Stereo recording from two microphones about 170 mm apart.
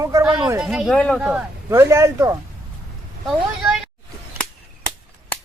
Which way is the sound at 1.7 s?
15° right (ahead or behind).